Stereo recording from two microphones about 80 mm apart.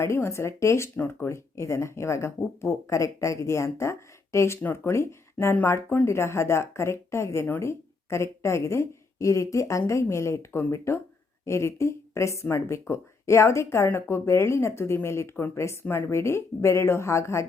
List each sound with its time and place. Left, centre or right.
0.0 s speech: left